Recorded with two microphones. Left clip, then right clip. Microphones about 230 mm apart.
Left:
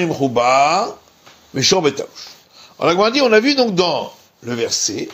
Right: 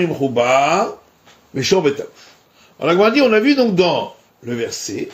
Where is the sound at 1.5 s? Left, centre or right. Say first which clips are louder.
Left 1 dB; centre.